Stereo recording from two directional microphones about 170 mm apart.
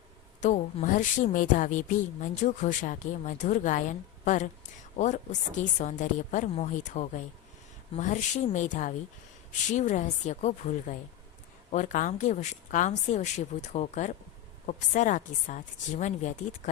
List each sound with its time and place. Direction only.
0.4 s speech: 45° left (ahead or behind)